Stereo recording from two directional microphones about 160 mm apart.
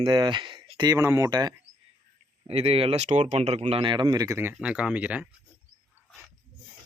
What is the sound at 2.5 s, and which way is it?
Speech, 40° right (ahead or behind).